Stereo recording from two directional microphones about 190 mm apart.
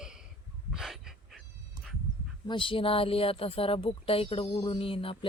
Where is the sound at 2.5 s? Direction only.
25° left (ahead or behind).